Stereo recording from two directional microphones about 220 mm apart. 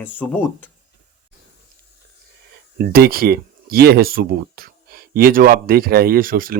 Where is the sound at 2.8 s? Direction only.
45° right (ahead or behind).